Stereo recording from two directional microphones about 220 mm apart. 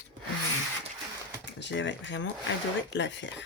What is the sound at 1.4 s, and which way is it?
Speech, 55° left (ahead or behind).